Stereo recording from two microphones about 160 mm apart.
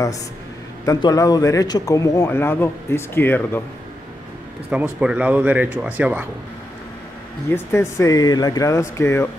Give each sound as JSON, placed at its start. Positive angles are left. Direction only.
{"t": 0.8, "sound": "speech", "side_deg": 20}
{"t": 4.6, "sound": "speech", "side_deg": -10}
{"t": 7.5, "sound": "speech", "side_deg": 15}